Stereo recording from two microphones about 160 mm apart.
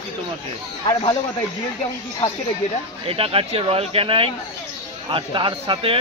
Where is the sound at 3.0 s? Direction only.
35° right (ahead or behind).